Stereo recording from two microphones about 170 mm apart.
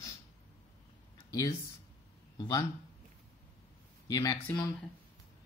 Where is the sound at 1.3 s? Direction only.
20° left (ahead or behind).